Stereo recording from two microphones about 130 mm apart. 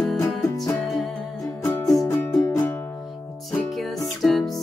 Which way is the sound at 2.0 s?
20° left (ahead or behind).